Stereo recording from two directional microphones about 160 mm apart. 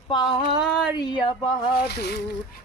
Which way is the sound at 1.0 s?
30° left (ahead or behind).